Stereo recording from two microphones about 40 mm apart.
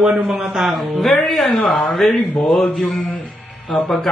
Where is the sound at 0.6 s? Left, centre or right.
Centre.